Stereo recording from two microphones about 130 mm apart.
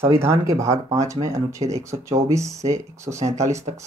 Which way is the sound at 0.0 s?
20° right (ahead or behind).